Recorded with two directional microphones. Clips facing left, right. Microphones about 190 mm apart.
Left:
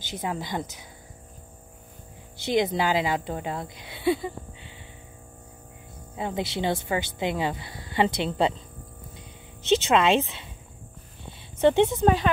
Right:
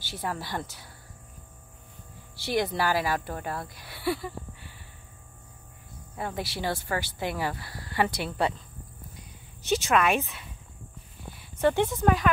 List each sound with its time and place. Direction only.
0.0 s speech: 20° left (ahead or behind)
2.3 s speech: 20° left (ahead or behind)
6.1 s speech: 20° left (ahead or behind)
9.6 s speech: 20° left (ahead or behind)